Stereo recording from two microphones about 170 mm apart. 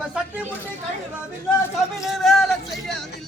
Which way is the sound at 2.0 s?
Centre (ahead or behind).